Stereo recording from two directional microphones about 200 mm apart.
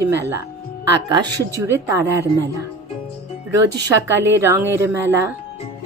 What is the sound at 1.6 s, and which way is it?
Speech, 15° right (ahead or behind).